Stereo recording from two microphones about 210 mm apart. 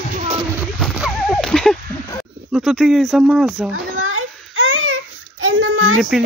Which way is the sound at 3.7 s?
75° right (ahead or behind).